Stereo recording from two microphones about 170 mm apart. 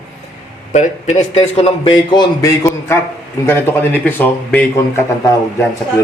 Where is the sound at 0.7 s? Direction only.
45° left (ahead or behind); by 5.0 s 10° left (ahead or behind).